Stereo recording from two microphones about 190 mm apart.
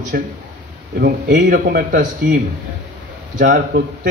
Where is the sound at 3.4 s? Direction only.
55° right (ahead or behind).